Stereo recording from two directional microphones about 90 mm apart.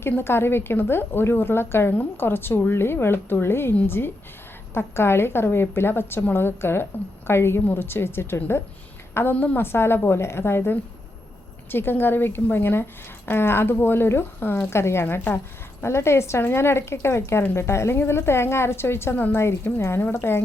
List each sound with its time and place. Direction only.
0.1 s speech: 25° left (ahead or behind)